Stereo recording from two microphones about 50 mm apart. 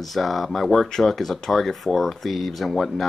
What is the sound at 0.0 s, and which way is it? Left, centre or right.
Speech, centre.